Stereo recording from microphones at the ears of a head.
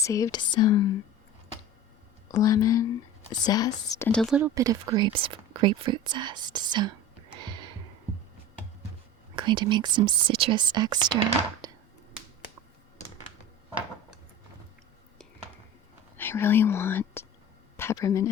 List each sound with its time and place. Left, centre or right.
0.0 s speech: left
2.3 s speech: left
4.3 s speech: right
9.3 s speech: right
16.1 s speech: left